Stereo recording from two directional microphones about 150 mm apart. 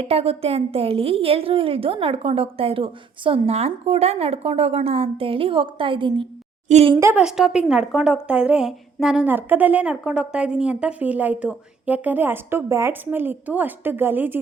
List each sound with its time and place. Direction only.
0.0 s a woman's voice: 40° right (ahead or behind)
6.7 s a woman's voice: 45° right (ahead or behind)
6.9 s a woman's voice: 10° right (ahead or behind)